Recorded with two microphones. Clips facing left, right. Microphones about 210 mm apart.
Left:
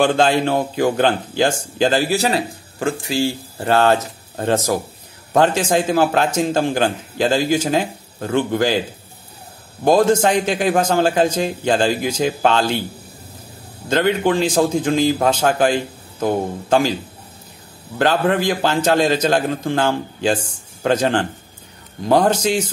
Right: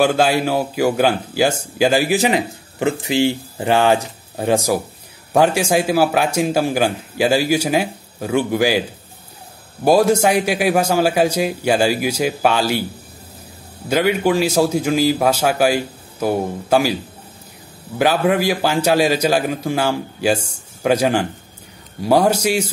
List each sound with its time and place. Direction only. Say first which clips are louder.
0.0 s speech: even; 10° right (ahead or behind)
9.8 s speech: even; 10° right (ahead or behind)
13.8 s speech: even; 10° right (ahead or behind)